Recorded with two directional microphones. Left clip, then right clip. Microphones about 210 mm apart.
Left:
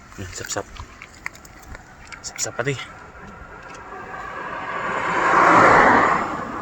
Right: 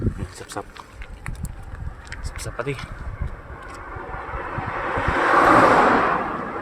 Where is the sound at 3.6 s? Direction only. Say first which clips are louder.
Right 1 dB; 45° right (ahead or behind).